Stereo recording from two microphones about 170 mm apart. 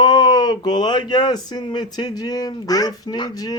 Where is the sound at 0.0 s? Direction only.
25° left (ahead or behind).